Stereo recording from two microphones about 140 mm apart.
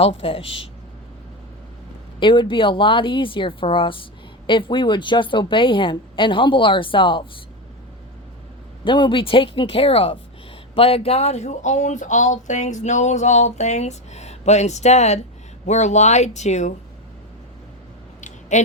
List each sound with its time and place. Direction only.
0.0 s speech: 45° left (ahead or behind)
2.1 s a woman's voice: 35° left (ahead or behind)
8.8 s a woman's voice: 35° left (ahead or behind); by 16.7 s 55° left (ahead or behind)
18.2 s a sound: 60° left (ahead or behind)